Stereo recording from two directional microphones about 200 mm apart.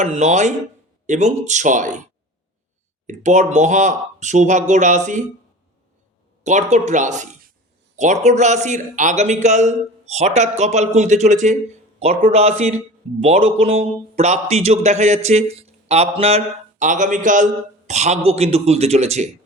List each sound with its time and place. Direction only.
0.0 s speech: 35° right (ahead or behind)
3.1 s speech: 35° right (ahead or behind)
6.4 s speech: 35° right (ahead or behind)